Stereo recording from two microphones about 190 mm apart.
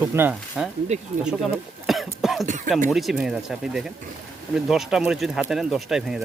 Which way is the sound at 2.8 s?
Centre (ahead or behind).